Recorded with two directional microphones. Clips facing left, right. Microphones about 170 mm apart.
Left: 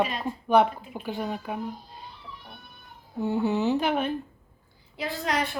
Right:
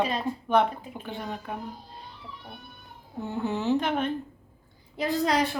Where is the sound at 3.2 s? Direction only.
5° left (ahead or behind).